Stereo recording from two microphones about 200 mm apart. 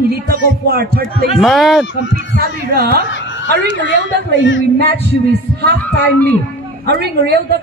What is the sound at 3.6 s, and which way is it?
A woman's voice, 65° left (ahead or behind).